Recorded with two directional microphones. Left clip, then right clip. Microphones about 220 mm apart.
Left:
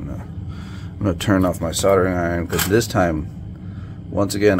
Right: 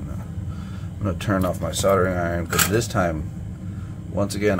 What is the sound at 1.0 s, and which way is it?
Speech, 40° left (ahead or behind).